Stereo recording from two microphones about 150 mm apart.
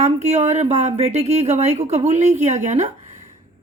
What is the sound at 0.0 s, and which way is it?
A woman's voice, 50° right (ahead or behind).